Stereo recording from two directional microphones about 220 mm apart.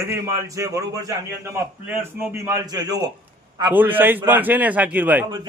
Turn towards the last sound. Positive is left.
turn(degrees=-10)  # may be behind; listen again after turning